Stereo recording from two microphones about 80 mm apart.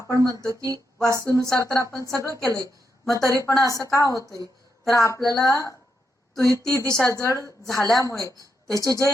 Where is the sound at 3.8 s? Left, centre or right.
Left.